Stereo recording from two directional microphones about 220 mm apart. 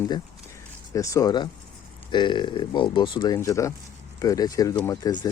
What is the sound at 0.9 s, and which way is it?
Speech, 15° left (ahead or behind).